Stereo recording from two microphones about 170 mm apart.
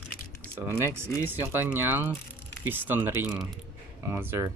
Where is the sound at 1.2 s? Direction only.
10° right (ahead or behind).